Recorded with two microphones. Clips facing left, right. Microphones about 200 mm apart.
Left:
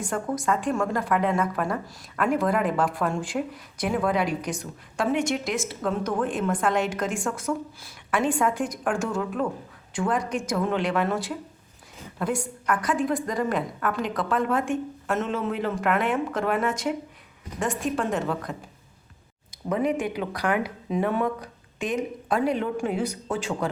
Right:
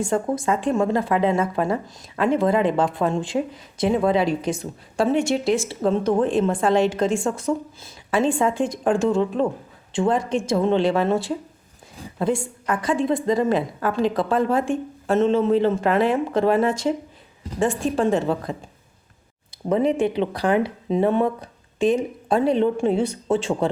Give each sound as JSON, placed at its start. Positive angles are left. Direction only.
{"t": 0.0, "sound": "a woman's voice", "side_deg": -25}
{"t": 19.6, "sound": "a woman's voice", "side_deg": -30}